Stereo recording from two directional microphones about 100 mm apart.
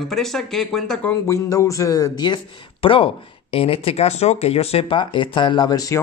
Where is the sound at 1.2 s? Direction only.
30° left (ahead or behind).